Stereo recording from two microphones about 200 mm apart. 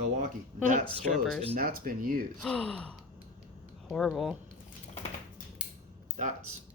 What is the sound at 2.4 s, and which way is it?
Sigh, 5° left (ahead or behind).